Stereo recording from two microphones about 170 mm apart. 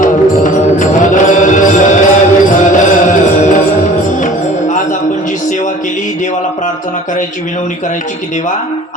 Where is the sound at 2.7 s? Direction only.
50° left (ahead or behind).